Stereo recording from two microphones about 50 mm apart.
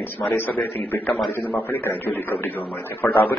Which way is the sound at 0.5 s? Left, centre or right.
Left.